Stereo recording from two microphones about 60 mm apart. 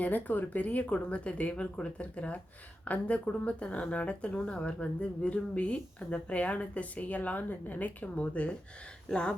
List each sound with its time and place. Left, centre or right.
0.0 s speech: left; by 9.3 s centre